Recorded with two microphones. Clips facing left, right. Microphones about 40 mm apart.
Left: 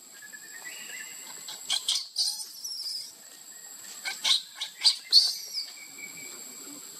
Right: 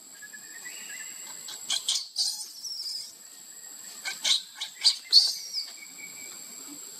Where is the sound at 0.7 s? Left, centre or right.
Centre.